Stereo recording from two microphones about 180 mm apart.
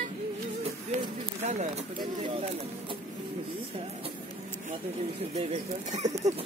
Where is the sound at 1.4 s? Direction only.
40° right (ahead or behind).